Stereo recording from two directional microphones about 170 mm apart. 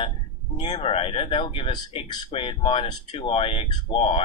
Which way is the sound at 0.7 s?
35° left (ahead or behind).